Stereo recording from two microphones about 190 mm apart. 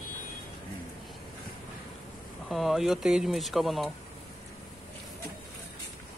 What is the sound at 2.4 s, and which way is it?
Speech, centre (ahead or behind).